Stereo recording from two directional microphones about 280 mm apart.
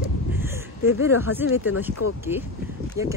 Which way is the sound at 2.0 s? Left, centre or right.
Left.